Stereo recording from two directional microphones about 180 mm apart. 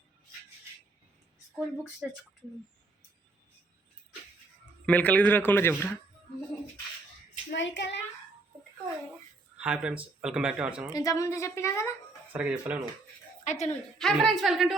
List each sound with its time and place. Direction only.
1.5 s speech: 5° right (ahead or behind)
4.9 s a woman's voice: 10° left (ahead or behind)
7.5 s a woman's voice: 90° left
9.6 s speech: 5° right (ahead or behind)
10.9 s a woman's voice: 20° left (ahead or behind)
12.3 s speech: 5° right (ahead or behind)
13.4 s a woman's voice: 40° left (ahead or behind)
14.0 s speech: centre (ahead or behind)